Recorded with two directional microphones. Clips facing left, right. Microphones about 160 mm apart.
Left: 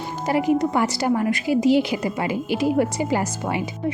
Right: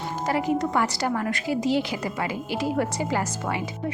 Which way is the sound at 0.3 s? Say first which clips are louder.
Left 5 dB; 15° left (ahead or behind).